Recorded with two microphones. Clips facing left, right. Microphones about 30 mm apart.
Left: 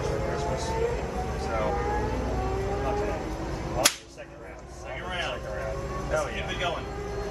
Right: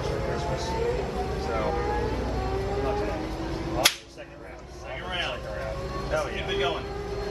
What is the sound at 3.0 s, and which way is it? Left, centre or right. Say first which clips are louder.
Speech: even; right.